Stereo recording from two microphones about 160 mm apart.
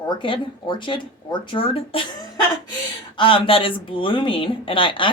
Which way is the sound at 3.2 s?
35° left (ahead or behind).